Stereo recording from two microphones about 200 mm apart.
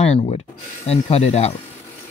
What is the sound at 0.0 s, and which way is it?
Speech, 30° left (ahead or behind).